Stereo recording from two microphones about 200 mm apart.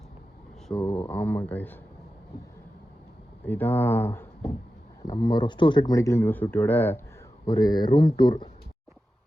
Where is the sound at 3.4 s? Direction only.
10° left (ahead or behind).